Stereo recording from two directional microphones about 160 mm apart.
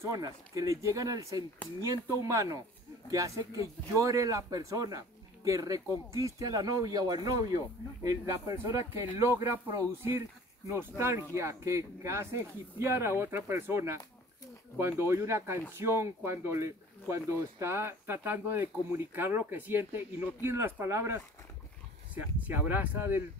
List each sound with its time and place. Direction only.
0.0 s speech: 20° right (ahead or behind)